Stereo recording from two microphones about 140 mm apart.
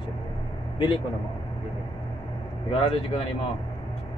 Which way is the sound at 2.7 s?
45° left (ahead or behind).